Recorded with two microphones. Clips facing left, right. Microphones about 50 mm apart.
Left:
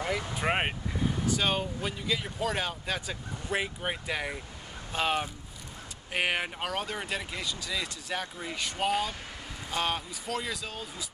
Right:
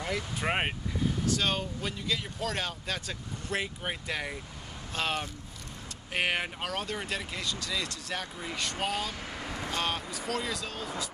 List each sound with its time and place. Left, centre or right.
0.3 s speech: centre
9.4 s vehicle: right
9.7 s speech: centre